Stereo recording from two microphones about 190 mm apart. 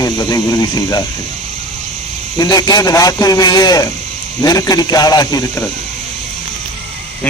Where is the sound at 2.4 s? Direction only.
20° left (ahead or behind).